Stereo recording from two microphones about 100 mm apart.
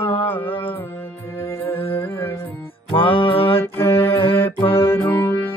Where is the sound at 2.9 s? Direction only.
60° left (ahead or behind).